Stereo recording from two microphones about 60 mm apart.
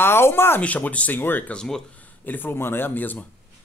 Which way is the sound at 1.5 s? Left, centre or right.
Centre.